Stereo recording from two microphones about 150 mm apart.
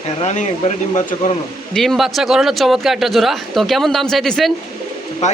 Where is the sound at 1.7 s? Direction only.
Centre (ahead or behind).